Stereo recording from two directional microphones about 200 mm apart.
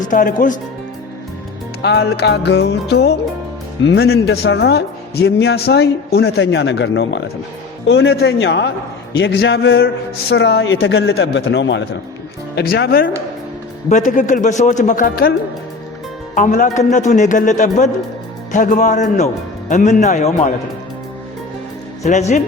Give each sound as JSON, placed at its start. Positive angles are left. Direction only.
{"t": 0.0, "sound": "a man's voice", "side_deg": 40}
{"t": 1.8, "sound": "a man's voice", "side_deg": 60}
{"t": 9.7, "sound": "a man's voice", "side_deg": 55}
{"t": 12.5, "sound": "speech", "side_deg": 55}
{"t": 13.9, "sound": "a man's voice", "side_deg": 40}
{"t": 16.3, "sound": "a man's voice", "side_deg": 40}
{"t": 22.0, "sound": "a man's voice", "side_deg": 35}